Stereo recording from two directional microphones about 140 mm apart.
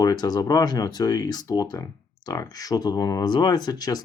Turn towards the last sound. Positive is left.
turn(degrees=30)  # may be behind; listen again after turning